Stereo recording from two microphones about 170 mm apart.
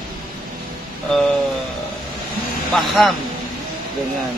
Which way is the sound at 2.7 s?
Centre (ahead or behind).